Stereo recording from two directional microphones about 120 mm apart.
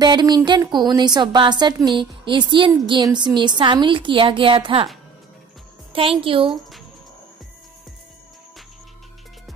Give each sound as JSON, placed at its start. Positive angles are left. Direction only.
{"t": 0.0, "sound": "a sound", "side_deg": -35}
{"t": 0.5, "sound": "a woman's voice", "side_deg": -40}
{"t": 5.9, "sound": "a woman's voice", "side_deg": -50}
{"t": 6.4, "sound": "speech", "side_deg": 0}